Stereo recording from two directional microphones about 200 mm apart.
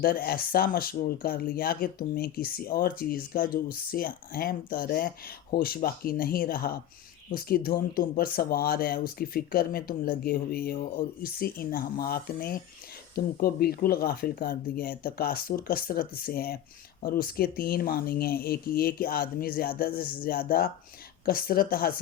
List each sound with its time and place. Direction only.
0.0 s speech: 50° left (ahead or behind)